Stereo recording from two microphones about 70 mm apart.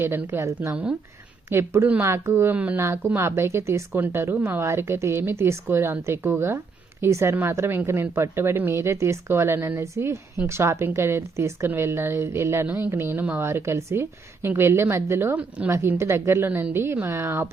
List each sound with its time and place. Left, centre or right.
0.0 s a woman's voice: right
0.7 s speech: centre
1.5 s a woman's voice: right
15.4 s speech: centre
15.7 s a woman's voice: right